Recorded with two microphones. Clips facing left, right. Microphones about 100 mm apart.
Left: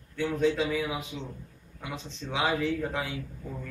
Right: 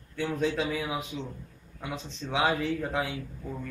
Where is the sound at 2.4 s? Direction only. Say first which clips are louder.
Left 3 dB; 20° right (ahead or behind).